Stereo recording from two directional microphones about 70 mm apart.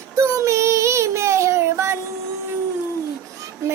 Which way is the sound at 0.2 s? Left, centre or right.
Right.